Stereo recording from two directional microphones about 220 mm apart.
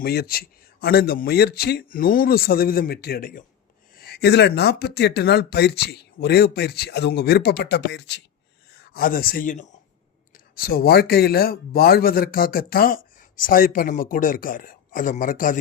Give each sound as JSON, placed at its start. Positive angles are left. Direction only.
{"t": 0.0, "sound": "speech", "side_deg": 45}
{"t": 8.9, "sound": "a man's voice", "side_deg": 40}